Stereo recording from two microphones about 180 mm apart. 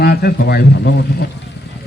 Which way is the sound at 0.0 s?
60° left (ahead or behind).